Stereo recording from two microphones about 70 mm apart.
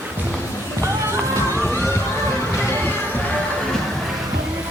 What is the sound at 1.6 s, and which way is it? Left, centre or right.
Music, left.